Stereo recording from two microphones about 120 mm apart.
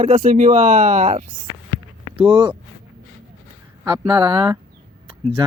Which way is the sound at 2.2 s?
45° right (ahead or behind).